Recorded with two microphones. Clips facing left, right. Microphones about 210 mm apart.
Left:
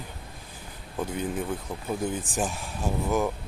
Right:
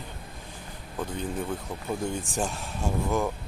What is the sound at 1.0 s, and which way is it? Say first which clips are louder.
Speech: left 2 dB; 10° left (ahead or behind).